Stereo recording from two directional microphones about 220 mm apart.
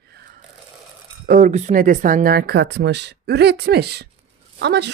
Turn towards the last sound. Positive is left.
turn(degrees=-50)  # may be behind; listen again after turning